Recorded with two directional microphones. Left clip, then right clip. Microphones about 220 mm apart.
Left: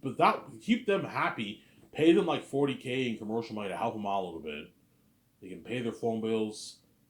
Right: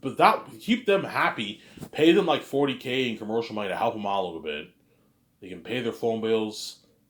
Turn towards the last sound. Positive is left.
turn(degrees=-15)  # may be behind; listen again after turning